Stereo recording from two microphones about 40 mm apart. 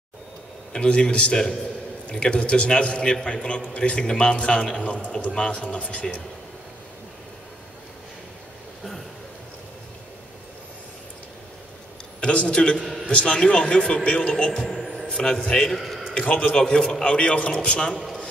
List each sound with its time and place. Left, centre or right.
0.7 s a man's voice: left
12.2 s a man's voice: left
12.7 s a man's voice: centre
13.0 s a man's voice: left
14.7 s a sound: centre
15.2 s a man's voice: left
15.7 s a sound: centre
16.2 s a man's voice: left
16.5 s a man's voice: centre